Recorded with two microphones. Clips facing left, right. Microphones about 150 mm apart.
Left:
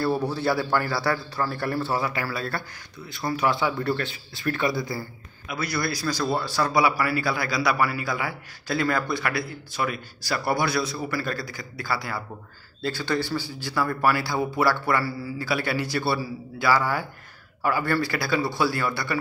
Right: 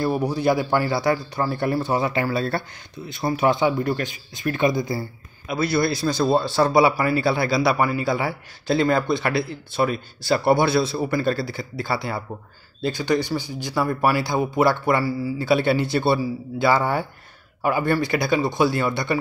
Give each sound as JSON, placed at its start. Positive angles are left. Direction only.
{"t": 0.0, "sound": "a man's voice", "side_deg": -15}